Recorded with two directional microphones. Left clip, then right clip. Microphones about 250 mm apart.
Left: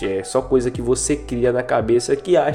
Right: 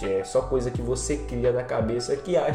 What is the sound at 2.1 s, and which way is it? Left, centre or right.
Speech, left.